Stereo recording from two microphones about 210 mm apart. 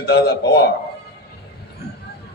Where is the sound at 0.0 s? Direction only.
50° left (ahead or behind).